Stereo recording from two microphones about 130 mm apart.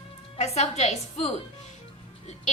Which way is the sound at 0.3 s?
55° left (ahead or behind).